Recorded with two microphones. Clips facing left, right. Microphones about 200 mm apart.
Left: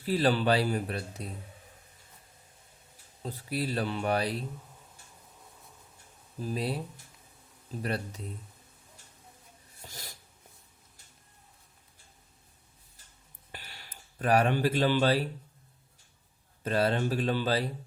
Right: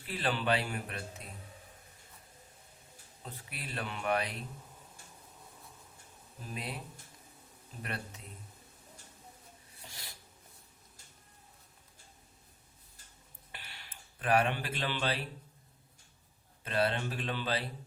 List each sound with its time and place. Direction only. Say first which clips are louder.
0.0 s speech: left 8 dB; 35° left (ahead or behind)
3.2 s speech: left 13 dB; 35° left (ahead or behind)
6.4 s speech: left 10 dB; 35° left (ahead or behind)
7.8 s speech: left 8 dB; 35° left (ahead or behind)
9.8 s a sound: left 5 dB; 40° left (ahead or behind)
13.5 s a sound: left 4 dB; 40° left (ahead or behind)
16.6 s speech: left 5 dB; 40° left (ahead or behind)